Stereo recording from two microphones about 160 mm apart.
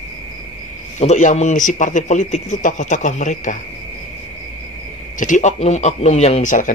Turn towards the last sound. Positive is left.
turn(degrees=45)  # may be behind; listen again after turning